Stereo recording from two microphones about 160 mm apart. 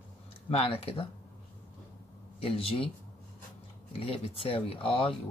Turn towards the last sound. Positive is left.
turn(degrees=35)  # may be behind; listen again after turning